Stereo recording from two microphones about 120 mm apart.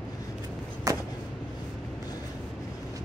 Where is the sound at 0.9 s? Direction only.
30° right (ahead or behind).